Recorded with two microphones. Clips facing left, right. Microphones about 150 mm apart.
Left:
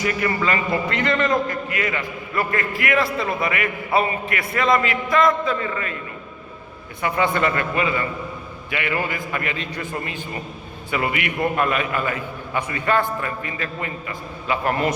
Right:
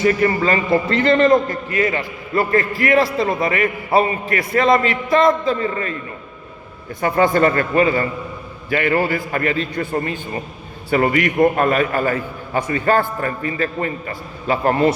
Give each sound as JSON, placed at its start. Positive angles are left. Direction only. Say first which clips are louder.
{"t": 0.0, "sound": "a man's voice", "louder": "right 6 dB", "side_deg": -35}
{"t": 7.0, "sound": "a man's voice", "louder": "right 6 dB", "side_deg": -40}